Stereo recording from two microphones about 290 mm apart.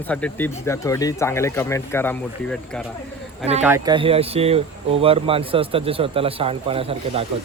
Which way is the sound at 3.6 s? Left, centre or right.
Centre.